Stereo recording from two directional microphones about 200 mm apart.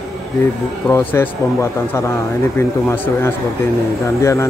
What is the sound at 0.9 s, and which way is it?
Speech, 10° left (ahead or behind).